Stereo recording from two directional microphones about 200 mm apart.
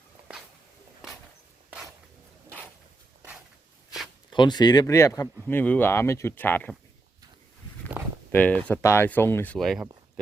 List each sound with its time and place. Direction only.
4.3 s speech: 20° left (ahead or behind)
8.0 s walk: 10° right (ahead or behind)
8.3 s speech: 10° left (ahead or behind)